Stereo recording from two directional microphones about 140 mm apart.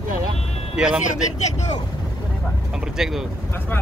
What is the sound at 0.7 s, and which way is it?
Speech, 5° right (ahead or behind).